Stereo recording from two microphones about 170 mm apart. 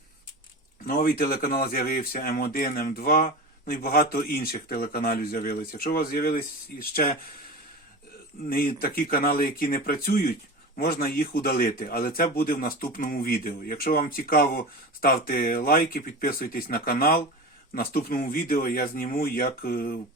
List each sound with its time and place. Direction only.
0.9 s speech: 60° left (ahead or behind)
8.4 s speech: 60° left (ahead or behind)